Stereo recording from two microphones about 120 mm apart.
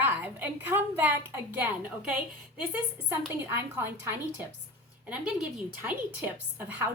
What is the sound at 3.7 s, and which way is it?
A woman's voice, 15° right (ahead or behind).